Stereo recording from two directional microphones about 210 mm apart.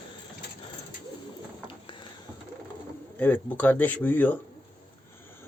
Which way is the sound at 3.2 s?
10° left (ahead or behind).